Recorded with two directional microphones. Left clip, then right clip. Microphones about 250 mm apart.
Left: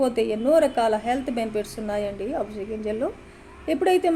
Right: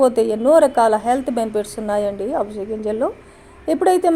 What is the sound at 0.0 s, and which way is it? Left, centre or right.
Speech, right.